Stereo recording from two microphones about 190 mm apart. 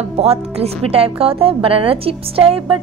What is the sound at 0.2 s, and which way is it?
A woman's voice, 30° right (ahead or behind).